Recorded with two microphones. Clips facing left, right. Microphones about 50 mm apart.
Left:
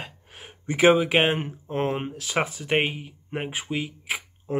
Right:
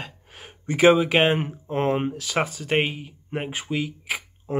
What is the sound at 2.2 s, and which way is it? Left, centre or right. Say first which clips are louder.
Speech: right 1 dB; centre.